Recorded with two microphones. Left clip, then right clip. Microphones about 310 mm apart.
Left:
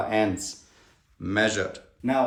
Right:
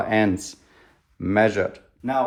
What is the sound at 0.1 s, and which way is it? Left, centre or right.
Speech, right.